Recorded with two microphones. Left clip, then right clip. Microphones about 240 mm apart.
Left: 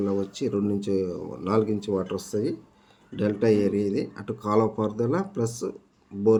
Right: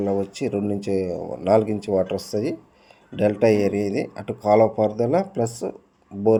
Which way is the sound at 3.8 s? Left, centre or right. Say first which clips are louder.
Right 3 dB; left.